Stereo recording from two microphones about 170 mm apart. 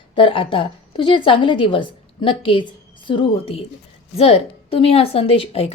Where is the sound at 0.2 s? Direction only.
30° left (ahead or behind).